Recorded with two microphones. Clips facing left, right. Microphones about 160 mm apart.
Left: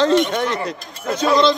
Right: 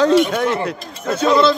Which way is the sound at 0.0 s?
10° right (ahead or behind).